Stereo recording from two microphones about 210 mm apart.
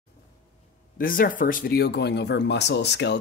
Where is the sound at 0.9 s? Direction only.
40° left (ahead or behind).